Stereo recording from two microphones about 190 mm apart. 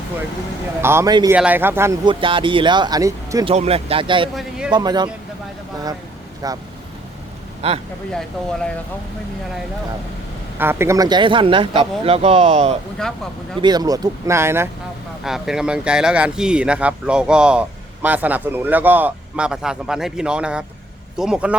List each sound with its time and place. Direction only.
0.8 s a man's voice: 15° right (ahead or behind)
2.0 s speech: 25° right (ahead or behind)
3.4 s speech: 35° right (ahead or behind)
4.4 s a sound: 5° right (ahead or behind)
4.7 s speech: 20° right (ahead or behind)
6.4 s speech: 20° right (ahead or behind)
7.6 s speech: 30° right (ahead or behind)
8.1 s speech: 5° left (ahead or behind)
10.6 s speech: 10° right (ahead or behind); by 12.7 s 35° right (ahead or behind)
13.0 s speech: 5° left (ahead or behind)
13.6 s speech: 20° right (ahead or behind)
15.2 s speech: centre (ahead or behind)